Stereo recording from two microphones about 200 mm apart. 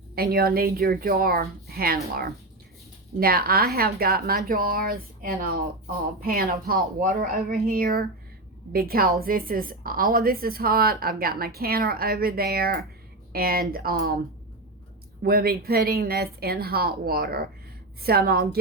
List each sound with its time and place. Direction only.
0.2 s speech: 50° right (ahead or behind)
3.2 s speech: 50° right (ahead or behind)
15.2 s speech: 50° right (ahead or behind)